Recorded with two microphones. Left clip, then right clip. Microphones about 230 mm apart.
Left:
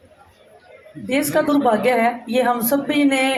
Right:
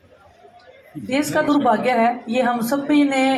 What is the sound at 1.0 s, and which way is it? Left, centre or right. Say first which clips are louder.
Speech: left 1 dB; left.